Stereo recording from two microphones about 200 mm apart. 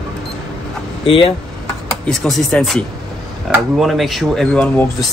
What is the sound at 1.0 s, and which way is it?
Speech, 25° left (ahead or behind).